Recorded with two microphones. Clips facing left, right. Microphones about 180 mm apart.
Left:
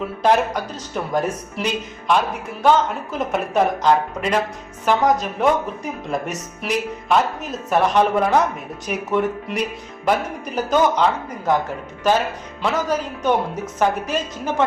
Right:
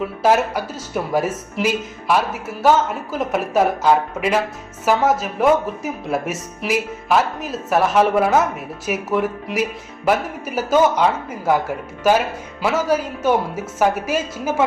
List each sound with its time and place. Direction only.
0.0 s speech: 5° right (ahead or behind)